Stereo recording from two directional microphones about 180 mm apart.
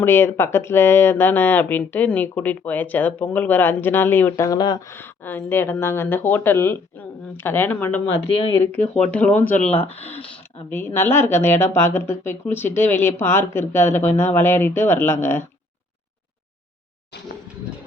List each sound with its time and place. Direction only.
0.0 s speech: 10° left (ahead or behind)
8.3 s speech: 30° left (ahead or behind)
8.5 s speech: 10° left (ahead or behind)
9.7 s speech: 35° left (ahead or behind)
10.7 s speech: 10° left (ahead or behind)